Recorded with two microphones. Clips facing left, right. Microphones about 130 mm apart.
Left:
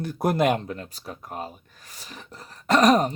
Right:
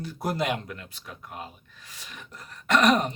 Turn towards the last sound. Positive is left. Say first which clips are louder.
# left 3 dB
turn(degrees=35)  # may be behind; listen again after turning